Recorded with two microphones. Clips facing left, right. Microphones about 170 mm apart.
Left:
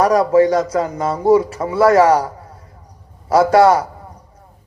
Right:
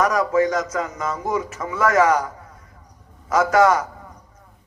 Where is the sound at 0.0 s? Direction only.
35° left (ahead or behind).